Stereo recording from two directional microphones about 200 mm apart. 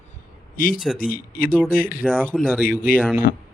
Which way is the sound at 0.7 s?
5° right (ahead or behind).